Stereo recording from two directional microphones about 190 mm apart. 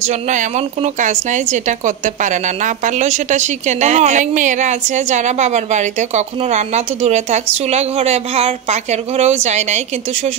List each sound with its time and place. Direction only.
0.0 s a woman's voice: 40° right (ahead or behind)